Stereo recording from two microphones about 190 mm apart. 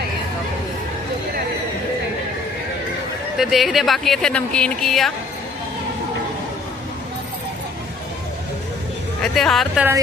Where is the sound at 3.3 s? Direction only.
Centre (ahead or behind).